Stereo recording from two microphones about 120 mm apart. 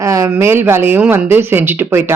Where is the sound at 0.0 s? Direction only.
30° right (ahead or behind).